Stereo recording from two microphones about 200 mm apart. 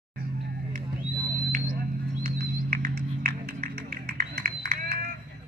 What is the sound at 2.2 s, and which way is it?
Music, 45° right (ahead or behind).